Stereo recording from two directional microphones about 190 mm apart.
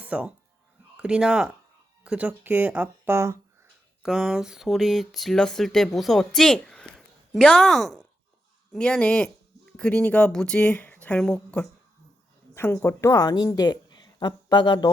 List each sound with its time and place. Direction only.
0.0 s speech: 5° right (ahead or behind)
4.0 s a woman's voice: 5° right (ahead or behind); by 14.8 s 25° left (ahead or behind)